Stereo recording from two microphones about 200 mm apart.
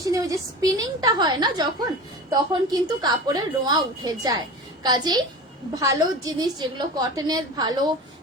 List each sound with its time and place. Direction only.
0.0 s a woman's voice: 15° right (ahead or behind)